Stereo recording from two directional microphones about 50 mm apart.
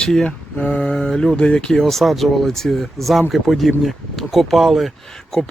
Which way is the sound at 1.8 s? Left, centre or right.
Centre.